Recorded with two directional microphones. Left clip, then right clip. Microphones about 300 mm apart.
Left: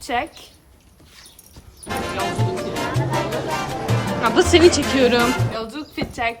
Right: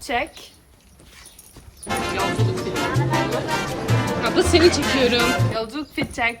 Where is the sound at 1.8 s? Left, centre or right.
Centre.